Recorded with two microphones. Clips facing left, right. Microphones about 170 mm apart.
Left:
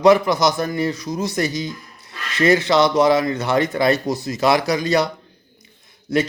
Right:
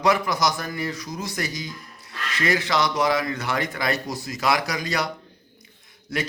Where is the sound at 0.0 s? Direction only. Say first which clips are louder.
Left 8 dB; 25° left (ahead or behind).